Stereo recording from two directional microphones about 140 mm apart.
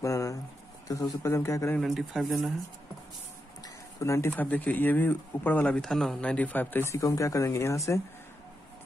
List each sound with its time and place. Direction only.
0.0 s a sound: 25° left (ahead or behind)
0.8 s speech: 25° left (ahead or behind)
1.8 s speech: centre (ahead or behind)
3.6 s speech: 20° left (ahead or behind)